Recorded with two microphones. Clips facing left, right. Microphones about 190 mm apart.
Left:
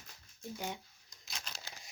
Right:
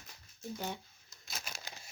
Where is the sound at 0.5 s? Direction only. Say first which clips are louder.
Right 1 dB; 15° left (ahead or behind).